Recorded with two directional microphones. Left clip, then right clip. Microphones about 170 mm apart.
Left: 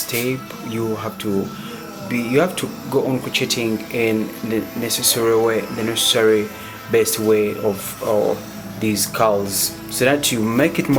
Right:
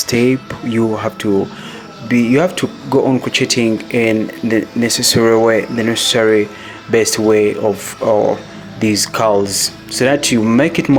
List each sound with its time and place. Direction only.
0.1 s speech: 35° right (ahead or behind)
8.8 s speech: 35° right (ahead or behind)